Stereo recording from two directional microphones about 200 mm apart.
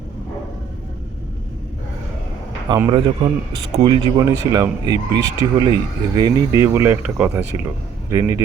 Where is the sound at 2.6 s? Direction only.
20° right (ahead or behind).